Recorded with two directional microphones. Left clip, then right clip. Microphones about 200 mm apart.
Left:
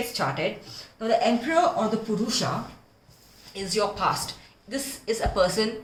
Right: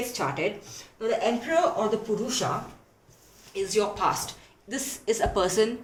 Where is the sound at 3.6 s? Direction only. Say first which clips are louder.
Even; 45° right (ahead or behind).